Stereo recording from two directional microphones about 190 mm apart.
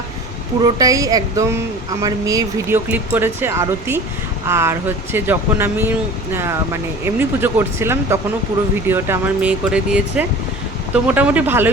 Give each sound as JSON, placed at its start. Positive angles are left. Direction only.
{"t": 0.6, "sound": "speech", "side_deg": -20}